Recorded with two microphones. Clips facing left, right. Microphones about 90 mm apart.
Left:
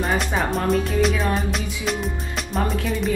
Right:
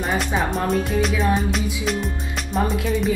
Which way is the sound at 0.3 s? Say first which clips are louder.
Even; centre (ahead or behind).